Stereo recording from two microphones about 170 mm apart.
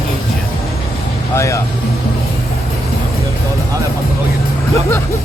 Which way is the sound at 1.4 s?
15° left (ahead or behind).